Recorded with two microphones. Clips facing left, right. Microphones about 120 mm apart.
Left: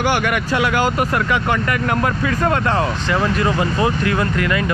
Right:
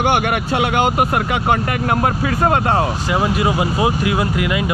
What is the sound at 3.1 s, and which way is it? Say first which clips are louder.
Speech: right 1 dB; 10° right (ahead or behind).